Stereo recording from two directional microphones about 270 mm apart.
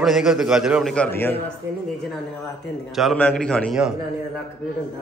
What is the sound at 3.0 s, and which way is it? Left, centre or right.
Speech, centre.